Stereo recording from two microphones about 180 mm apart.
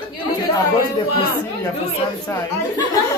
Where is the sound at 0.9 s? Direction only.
20° left (ahead or behind).